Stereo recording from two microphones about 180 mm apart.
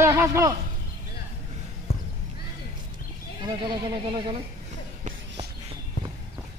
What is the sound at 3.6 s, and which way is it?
Speech, 25° right (ahead or behind).